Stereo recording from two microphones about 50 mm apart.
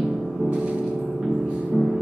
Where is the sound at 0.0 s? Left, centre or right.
Centre.